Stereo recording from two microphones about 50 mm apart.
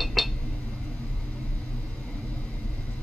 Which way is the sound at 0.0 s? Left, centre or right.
Centre.